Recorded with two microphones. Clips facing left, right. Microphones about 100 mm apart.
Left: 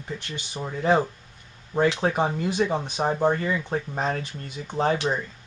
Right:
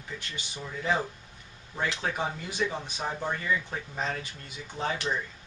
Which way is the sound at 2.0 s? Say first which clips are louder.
Left 8 dB; 40° left (ahead or behind).